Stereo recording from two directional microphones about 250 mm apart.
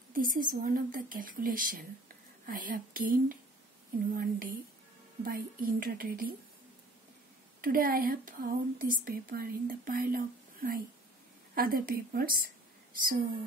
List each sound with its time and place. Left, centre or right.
0.1 s speech: right
7.6 s speech: right